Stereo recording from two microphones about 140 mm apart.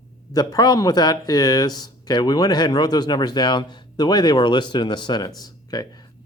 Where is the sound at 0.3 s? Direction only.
30° left (ahead or behind).